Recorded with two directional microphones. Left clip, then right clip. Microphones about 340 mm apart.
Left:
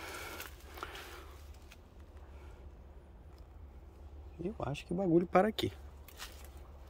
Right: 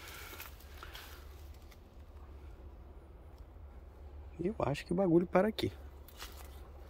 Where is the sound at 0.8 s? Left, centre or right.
Centre.